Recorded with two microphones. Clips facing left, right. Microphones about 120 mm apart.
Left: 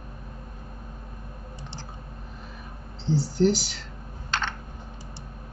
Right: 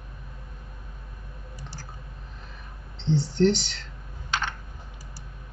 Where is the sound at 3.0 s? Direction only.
5° left (ahead or behind).